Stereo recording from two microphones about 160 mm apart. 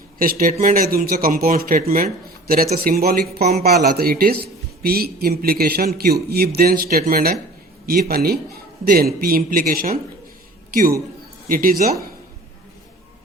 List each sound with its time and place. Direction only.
0.2 s speech: 60° right (ahead or behind)